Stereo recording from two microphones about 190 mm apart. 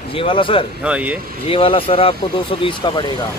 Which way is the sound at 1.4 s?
30° left (ahead or behind).